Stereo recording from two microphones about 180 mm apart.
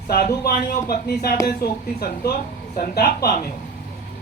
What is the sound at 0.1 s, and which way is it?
A man's voice, 60° left (ahead or behind).